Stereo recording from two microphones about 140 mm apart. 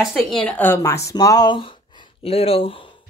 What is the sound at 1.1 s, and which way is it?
Speech, 25° left (ahead or behind).